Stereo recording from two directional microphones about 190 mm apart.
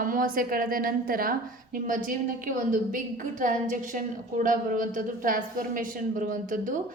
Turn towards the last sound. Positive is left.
turn(degrees=-45)  # may be behind; listen again after turning